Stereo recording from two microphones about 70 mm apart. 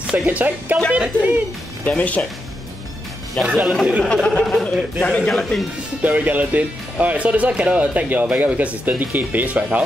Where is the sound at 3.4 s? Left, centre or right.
Centre.